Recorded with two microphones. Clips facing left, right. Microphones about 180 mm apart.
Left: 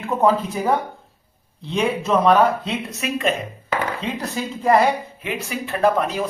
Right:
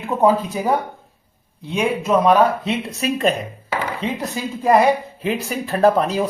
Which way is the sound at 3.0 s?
35° right (ahead or behind).